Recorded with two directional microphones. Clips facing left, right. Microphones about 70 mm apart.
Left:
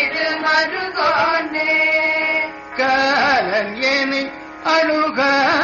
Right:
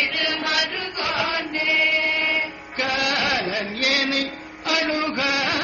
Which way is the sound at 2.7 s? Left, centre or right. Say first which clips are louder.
Left 8 dB; left.